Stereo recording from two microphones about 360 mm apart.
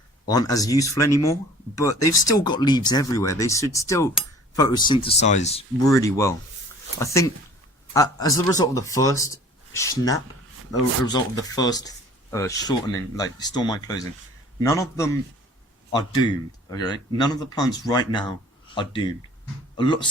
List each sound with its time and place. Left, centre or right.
0.3 s speech: centre